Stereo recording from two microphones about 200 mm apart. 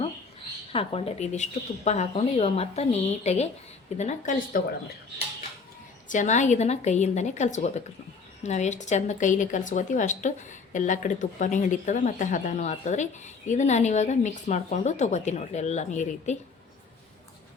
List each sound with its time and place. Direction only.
0.7 s a woman's voice: 30° left (ahead or behind)
6.1 s a woman's voice: 40° left (ahead or behind)